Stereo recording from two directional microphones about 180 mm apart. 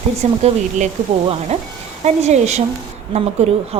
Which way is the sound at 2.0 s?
40° right (ahead or behind).